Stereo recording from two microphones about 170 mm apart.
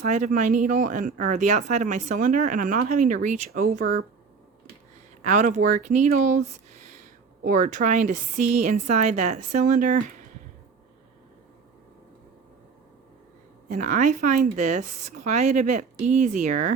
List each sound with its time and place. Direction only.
0.0 s speech: 45° right (ahead or behind)
5.2 s speech: 45° right (ahead or behind)
13.7 s speech: 50° right (ahead or behind)